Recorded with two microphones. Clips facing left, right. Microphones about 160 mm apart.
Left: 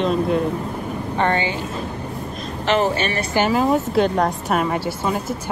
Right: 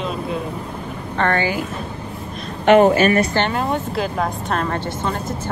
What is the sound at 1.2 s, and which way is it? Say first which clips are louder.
Speech: right 2 dB; 20° left (ahead or behind).